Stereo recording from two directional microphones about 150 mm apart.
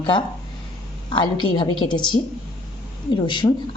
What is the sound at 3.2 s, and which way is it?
Speech, 30° left (ahead or behind).